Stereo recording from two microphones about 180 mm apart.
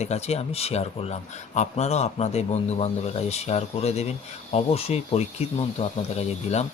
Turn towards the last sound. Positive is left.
turn(degrees=35)  # may be behind; listen again after turning